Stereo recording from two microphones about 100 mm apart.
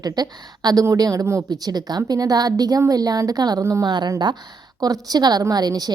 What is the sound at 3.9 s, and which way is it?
A woman's voice, 45° right (ahead or behind).